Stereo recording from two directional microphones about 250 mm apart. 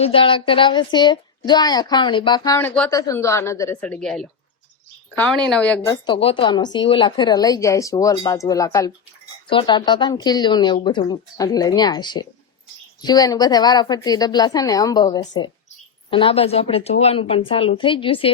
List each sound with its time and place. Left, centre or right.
0.0 s a woman's voice: left